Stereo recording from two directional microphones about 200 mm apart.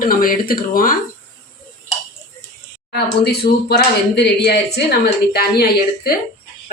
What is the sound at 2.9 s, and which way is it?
Speech, 55° left (ahead or behind).